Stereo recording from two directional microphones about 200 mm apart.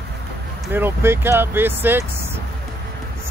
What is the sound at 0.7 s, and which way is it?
Speech, 10° right (ahead or behind).